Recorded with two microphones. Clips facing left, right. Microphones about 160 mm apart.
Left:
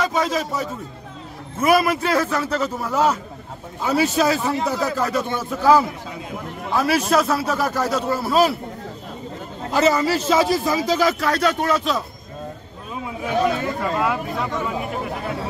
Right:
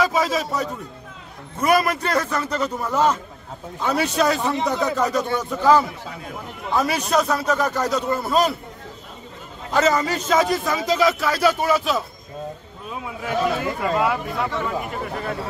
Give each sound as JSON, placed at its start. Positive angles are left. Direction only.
{"t": 0.0, "sound": "a man's voice", "side_deg": 0}
{"t": 9.7, "sound": "a man's voice", "side_deg": 10}
{"t": 13.7, "sound": "a man's voice", "side_deg": 0}
{"t": 14.5, "sound": "speech", "side_deg": 10}